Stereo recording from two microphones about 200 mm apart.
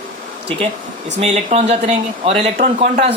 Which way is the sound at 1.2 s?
35° right (ahead or behind).